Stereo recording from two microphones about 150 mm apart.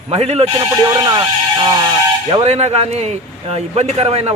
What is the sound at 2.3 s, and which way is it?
Speech, 45° right (ahead or behind).